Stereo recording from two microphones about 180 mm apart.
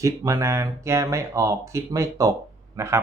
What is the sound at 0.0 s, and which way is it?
Speech, 20° right (ahead or behind).